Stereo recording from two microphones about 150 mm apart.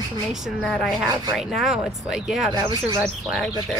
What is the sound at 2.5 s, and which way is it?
Speech, 25° right (ahead or behind).